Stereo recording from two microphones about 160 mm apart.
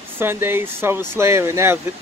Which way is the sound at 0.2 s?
15° right (ahead or behind).